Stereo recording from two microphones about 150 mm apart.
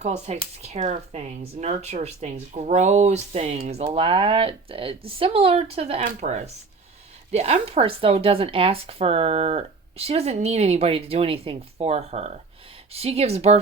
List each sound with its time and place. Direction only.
0.0 s speech: 45° right (ahead or behind)